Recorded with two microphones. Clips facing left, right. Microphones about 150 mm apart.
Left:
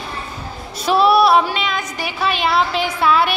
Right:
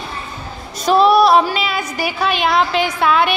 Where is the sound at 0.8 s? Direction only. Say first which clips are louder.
Right 2 dB; 5° left (ahead or behind).